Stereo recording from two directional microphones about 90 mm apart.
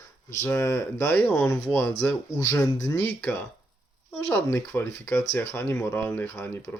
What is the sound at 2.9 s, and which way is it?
Speech, 25° left (ahead or behind).